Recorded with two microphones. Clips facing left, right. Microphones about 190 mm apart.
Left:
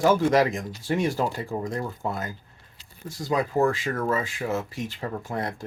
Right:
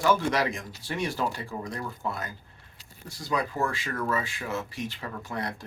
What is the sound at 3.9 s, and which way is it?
Speech, 25° left (ahead or behind).